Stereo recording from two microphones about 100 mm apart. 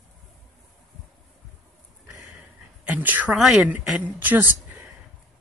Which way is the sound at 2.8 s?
15° right (ahead or behind).